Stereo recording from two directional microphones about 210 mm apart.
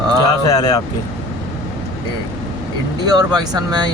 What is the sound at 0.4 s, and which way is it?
Speech, 20° left (ahead or behind).